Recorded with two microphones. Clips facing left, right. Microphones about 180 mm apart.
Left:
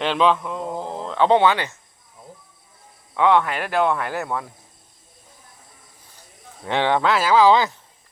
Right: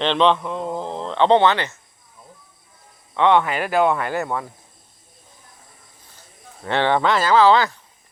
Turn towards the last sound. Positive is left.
turn(degrees=15)  # may be behind; listen again after turning